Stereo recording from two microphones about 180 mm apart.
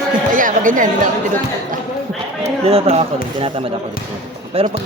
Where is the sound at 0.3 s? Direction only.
50° right (ahead or behind).